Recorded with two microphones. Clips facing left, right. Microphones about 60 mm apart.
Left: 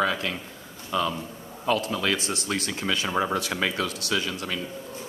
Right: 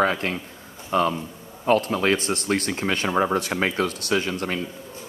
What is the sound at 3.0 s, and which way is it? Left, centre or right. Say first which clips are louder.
Speech: right 5 dB; right.